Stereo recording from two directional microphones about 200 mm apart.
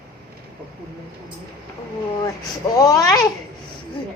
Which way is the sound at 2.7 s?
15° left (ahead or behind).